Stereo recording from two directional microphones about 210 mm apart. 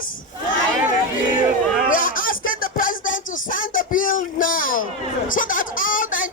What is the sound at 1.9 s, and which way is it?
Music, 40° left (ahead or behind).